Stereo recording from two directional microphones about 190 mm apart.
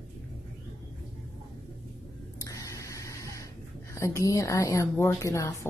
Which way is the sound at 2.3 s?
15° left (ahead or behind).